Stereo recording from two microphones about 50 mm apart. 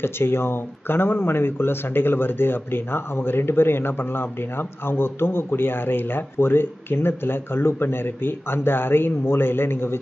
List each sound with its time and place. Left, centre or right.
0.0 s speech: left